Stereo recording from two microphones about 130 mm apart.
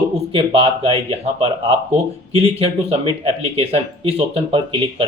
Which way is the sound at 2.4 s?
55° right (ahead or behind).